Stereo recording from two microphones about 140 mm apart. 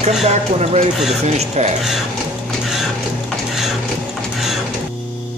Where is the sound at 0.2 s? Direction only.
50° right (ahead or behind).